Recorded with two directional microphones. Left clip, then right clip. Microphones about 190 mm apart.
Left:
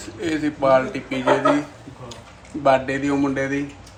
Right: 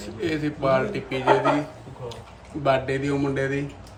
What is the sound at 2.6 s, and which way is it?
Speech, 10° left (ahead or behind).